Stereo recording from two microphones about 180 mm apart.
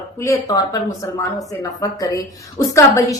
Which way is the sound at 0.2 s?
20° left (ahead or behind).